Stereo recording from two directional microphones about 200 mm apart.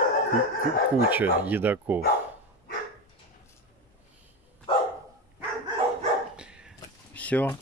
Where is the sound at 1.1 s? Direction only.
10° right (ahead or behind).